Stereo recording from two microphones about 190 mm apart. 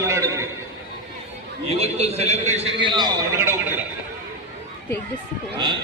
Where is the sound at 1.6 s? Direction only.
30° right (ahead or behind).